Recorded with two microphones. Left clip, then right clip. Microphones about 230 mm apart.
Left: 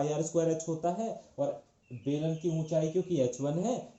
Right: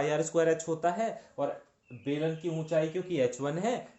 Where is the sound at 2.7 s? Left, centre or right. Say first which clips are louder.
Right 1 dB; right.